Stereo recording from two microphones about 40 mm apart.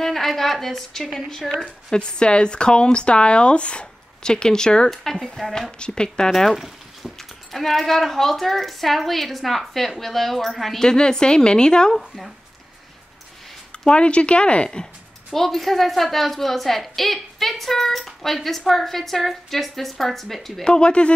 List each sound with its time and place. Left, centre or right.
0.0 s a woman's voice: centre
2.0 s a woman's voice: left
6.3 s a woman's voice: centre
10.8 s speech: centre
13.7 s speech: left
15.3 s speech: centre
20.6 s speech: left